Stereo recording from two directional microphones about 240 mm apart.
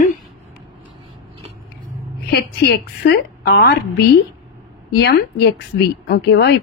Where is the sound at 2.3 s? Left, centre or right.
Left.